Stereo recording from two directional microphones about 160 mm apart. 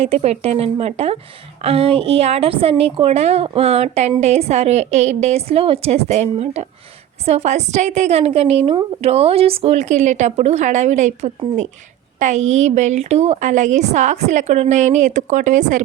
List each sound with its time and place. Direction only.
0.0 s a woman's voice: 40° right (ahead or behind)